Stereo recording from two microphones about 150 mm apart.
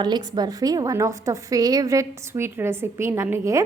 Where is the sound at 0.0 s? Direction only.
30° right (ahead or behind).